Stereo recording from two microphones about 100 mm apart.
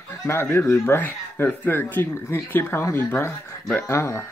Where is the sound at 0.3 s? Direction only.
25° left (ahead or behind).